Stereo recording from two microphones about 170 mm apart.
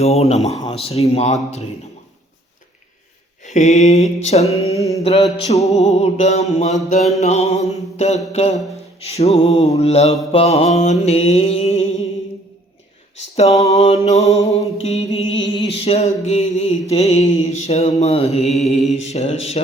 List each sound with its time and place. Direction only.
0.0 s mantra: 40° left (ahead or behind)
3.4 s mantra: 45° left (ahead or behind)
13.1 s mantra: 40° left (ahead or behind)